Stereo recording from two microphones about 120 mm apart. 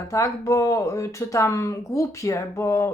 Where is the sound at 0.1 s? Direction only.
25° left (ahead or behind).